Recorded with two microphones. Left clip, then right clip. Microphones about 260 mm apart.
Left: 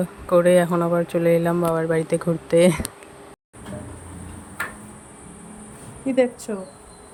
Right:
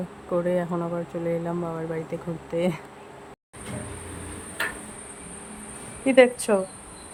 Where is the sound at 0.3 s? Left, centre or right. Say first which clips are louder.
Left 9 dB; centre.